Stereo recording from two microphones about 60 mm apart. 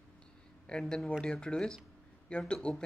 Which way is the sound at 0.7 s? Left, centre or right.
Centre.